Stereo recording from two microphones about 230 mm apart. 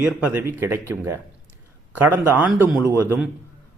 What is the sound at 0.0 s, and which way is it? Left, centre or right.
Speech, centre.